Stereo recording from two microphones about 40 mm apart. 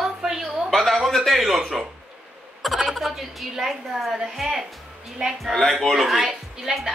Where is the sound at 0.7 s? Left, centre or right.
Centre.